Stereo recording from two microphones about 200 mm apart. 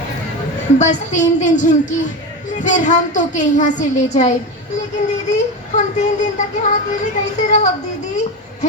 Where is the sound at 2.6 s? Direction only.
40° left (ahead or behind).